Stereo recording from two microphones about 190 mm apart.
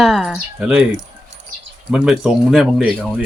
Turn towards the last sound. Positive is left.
turn(degrees=-5)  # may be behind; listen again after turning